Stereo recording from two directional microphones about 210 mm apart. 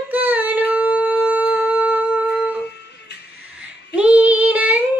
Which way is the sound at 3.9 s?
5° right (ahead or behind).